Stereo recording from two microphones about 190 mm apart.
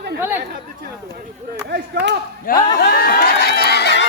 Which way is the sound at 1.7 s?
65° right (ahead or behind).